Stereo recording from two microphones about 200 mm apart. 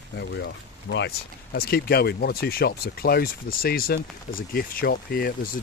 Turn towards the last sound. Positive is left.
turn(degrees=50)  # may be behind; listen again after turning